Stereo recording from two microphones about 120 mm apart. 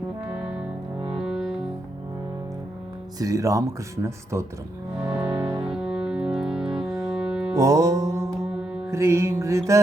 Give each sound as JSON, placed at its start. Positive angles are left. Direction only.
{"t": 1.2, "sound": "music", "side_deg": -5}
{"t": 3.2, "sound": "music", "side_deg": -30}
{"t": 7.5, "sound": "music", "side_deg": -25}